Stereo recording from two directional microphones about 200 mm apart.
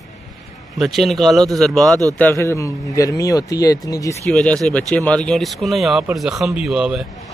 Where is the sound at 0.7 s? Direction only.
Centre (ahead or behind); by 4.2 s 15° left (ahead or behind).